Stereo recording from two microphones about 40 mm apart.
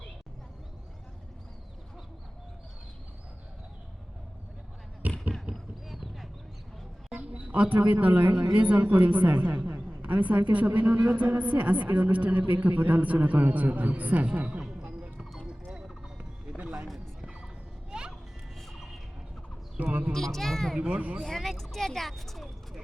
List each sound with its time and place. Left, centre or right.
5.0 s basketball bounce: right
5.9 s a sound: centre
7.2 s a woman's voice: right
10.0 s a woman's voice: right
14.6 s music: centre
14.8 s music: right
15.4 s clip-clop: right
16.6 s a sound: right
19.8 s a sound: right
20.1 s speech: centre
20.7 s speech: right
21.2 s speech: centre